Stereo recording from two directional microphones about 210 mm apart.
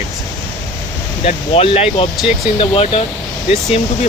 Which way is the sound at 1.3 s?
30° left (ahead or behind).